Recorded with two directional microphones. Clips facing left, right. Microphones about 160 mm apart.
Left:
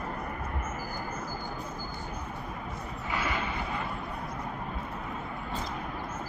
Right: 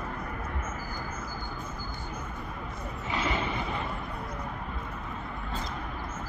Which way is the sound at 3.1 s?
25° right (ahead or behind).